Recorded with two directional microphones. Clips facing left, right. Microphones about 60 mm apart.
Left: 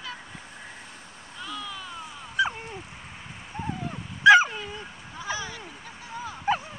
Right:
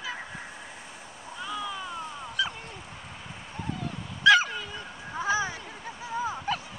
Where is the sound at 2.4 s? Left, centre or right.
Left.